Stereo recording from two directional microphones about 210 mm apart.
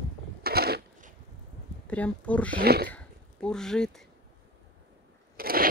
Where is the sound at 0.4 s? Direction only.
45° right (ahead or behind).